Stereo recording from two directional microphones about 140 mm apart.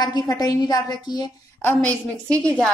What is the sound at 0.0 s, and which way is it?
A woman's voice, 30° left (ahead or behind).